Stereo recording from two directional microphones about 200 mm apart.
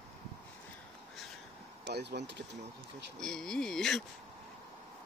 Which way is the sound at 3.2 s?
5° left (ahead or behind).